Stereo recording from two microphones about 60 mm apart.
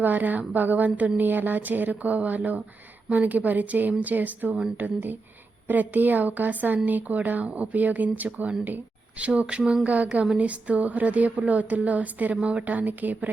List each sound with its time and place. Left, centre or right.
0.0 s speech: right